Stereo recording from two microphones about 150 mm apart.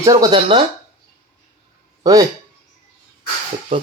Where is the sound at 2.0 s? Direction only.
25° right (ahead or behind).